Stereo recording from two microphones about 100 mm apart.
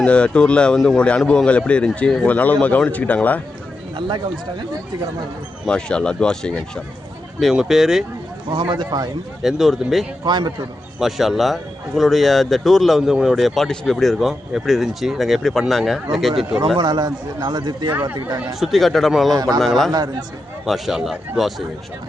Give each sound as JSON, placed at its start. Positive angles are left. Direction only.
{"t": 0.0, "sound": "a man's voice", "side_deg": 10}
{"t": 3.9, "sound": "speech", "side_deg": -50}
{"t": 5.6, "sound": "a man's voice", "side_deg": 10}
{"t": 7.3, "sound": "a man's voice", "side_deg": -5}
{"t": 8.7, "sound": "speech", "side_deg": -50}
{"t": 9.4, "sound": "a man's voice", "side_deg": -5}
{"t": 10.2, "sound": "speech", "side_deg": -50}
{"t": 11.0, "sound": "a man's voice", "side_deg": -5}
{"t": 16.7, "sound": "speech", "side_deg": -45}
{"t": 18.6, "sound": "a man's voice", "side_deg": 0}
{"t": 19.3, "sound": "a man's voice", "side_deg": -40}
{"t": 19.5, "sound": "a man's voice", "side_deg": 5}